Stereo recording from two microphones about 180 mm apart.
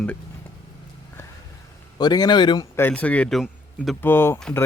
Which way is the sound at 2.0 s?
20° left (ahead or behind).